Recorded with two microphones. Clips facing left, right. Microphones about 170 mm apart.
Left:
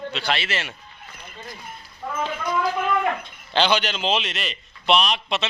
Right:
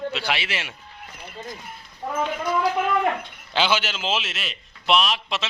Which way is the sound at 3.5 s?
5° right (ahead or behind).